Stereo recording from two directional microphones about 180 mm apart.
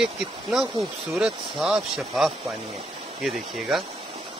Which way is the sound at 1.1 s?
5° right (ahead or behind).